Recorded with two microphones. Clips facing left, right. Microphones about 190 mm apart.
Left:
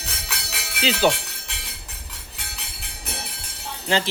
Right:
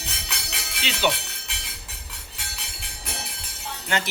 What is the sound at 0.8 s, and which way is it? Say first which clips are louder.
Speech: left 5 dB; 35° left (ahead or behind).